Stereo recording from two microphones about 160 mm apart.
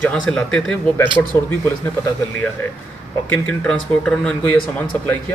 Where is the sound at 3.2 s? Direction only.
5° left (ahead or behind).